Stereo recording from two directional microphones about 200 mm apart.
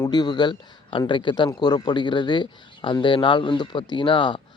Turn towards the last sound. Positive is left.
turn(degrees=25)  # may be behind; listen again after turning